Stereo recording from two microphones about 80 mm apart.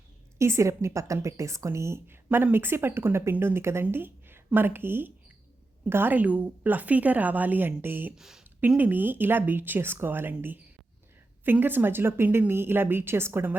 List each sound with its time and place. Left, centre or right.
0.3 s a woman's voice: right
8.1 s speech: centre
8.8 s a woman's voice: right
11.4 s a woman's voice: right